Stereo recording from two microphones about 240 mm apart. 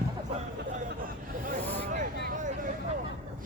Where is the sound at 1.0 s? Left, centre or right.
Right.